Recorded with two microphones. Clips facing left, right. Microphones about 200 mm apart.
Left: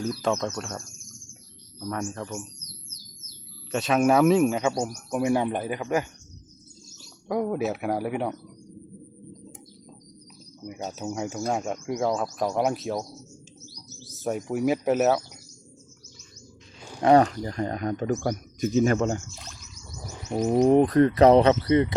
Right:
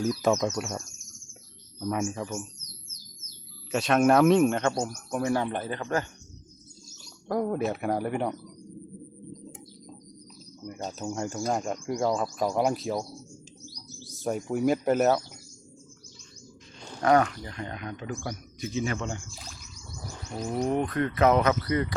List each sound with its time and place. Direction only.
0.4 s speech: 5° right (ahead or behind)
1.9 s speech: 5° right (ahead or behind)
3.7 s speech: centre (ahead or behind)
7.3 s speech: 5° left (ahead or behind)
10.6 s speech: 5° left (ahead or behind)
14.1 s speech: centre (ahead or behind)
16.8 s a sound: 15° left (ahead or behind)
17.1 s speech: 35° left (ahead or behind)
19.3 s speech: centre (ahead or behind)
20.6 s speech: 35° left (ahead or behind)